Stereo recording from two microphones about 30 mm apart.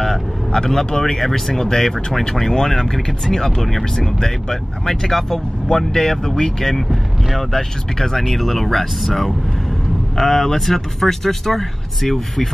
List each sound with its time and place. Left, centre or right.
0.5 s speech: centre